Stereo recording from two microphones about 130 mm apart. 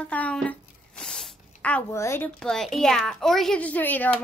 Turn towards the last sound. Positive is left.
turn(degrees=15)  # may be behind; listen again after turning